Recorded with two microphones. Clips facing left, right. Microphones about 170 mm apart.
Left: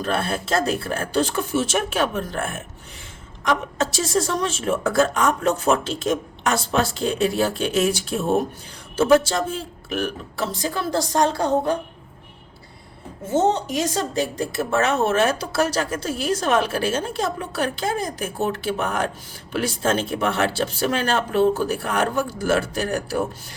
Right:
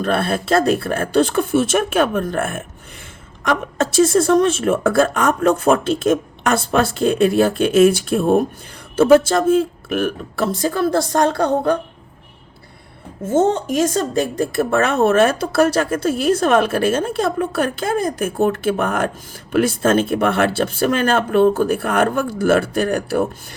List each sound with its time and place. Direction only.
0.0 s speech: 60° right (ahead or behind)
13.3 s speech: 50° right (ahead or behind)